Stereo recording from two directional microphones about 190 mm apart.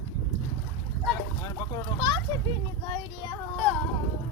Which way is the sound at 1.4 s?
20° left (ahead or behind).